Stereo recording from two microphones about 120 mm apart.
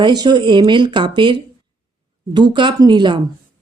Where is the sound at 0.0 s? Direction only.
35° right (ahead or behind).